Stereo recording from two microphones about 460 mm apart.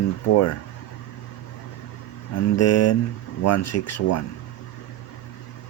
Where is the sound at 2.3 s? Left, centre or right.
Left.